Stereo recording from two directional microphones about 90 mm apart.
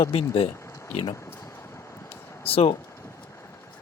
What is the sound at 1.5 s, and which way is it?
Vehicle, 30° left (ahead or behind).